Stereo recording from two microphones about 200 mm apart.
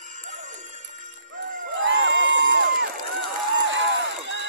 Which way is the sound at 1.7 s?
65° right (ahead or behind).